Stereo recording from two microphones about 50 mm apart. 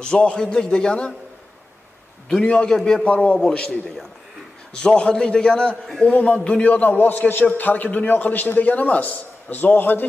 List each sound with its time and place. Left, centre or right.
0.0 s a man's voice: left
2.4 s a man's voice: left
4.7 s a man's voice: centre; by 10.0 s left